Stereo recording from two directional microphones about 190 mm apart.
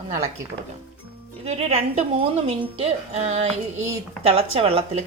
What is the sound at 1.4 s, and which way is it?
A woman's voice, 35° right (ahead or behind).